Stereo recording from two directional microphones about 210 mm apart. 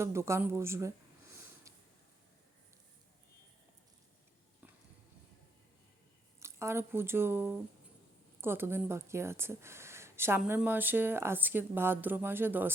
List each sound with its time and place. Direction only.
0.0 s speech: 10° right (ahead or behind)
1.7 s a sound: 15° right (ahead or behind)
6.4 s speech: 15° right (ahead or behind)